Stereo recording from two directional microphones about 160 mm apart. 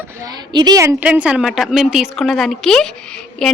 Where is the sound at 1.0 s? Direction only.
5° right (ahead or behind).